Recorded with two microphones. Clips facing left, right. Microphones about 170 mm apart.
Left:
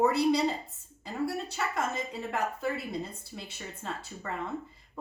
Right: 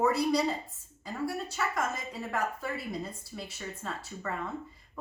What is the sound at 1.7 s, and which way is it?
Speech, 25° left (ahead or behind).